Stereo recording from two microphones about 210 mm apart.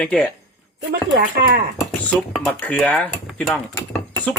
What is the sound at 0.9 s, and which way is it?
Speech, 55° right (ahead or behind).